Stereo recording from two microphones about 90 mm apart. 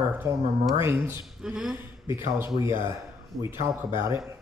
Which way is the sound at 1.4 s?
5° right (ahead or behind).